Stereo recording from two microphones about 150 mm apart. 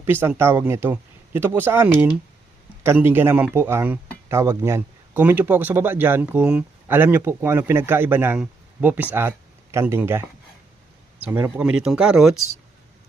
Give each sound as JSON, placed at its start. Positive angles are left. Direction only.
{"t": 0.0, "sound": "speech", "side_deg": -15}